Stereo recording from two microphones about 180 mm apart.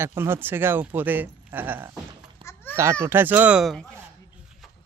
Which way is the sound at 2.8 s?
15° right (ahead or behind).